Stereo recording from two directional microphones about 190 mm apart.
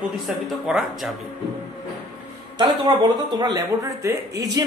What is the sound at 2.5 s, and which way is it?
A man's voice, 25° right (ahead or behind).